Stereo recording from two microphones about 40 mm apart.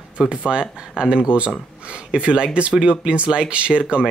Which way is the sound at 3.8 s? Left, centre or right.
Centre.